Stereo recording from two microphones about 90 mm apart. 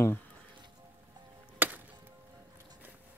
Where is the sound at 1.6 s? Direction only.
20° right (ahead or behind).